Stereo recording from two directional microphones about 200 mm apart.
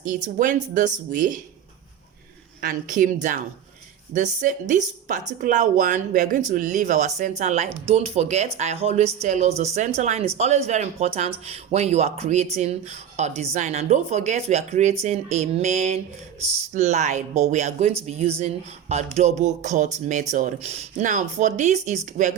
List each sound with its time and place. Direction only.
0.0 s speech: 40° right (ahead or behind)
2.6 s speech: 40° right (ahead or behind)